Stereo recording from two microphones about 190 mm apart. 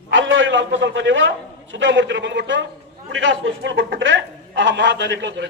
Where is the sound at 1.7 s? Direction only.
75° right (ahead or behind).